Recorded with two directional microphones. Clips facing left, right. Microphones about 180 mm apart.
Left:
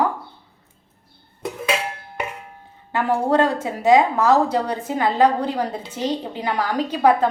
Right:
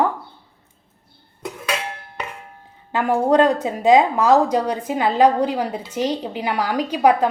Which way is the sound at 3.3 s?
20° right (ahead or behind).